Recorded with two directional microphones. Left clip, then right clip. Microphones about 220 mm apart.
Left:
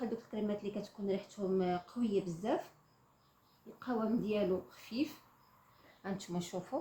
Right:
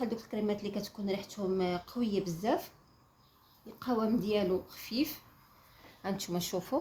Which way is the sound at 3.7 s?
50° right (ahead or behind).